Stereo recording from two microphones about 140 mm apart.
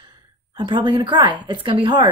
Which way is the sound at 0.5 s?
35° right (ahead or behind).